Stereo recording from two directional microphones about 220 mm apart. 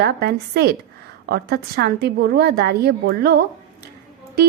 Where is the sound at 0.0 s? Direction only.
45° right (ahead or behind).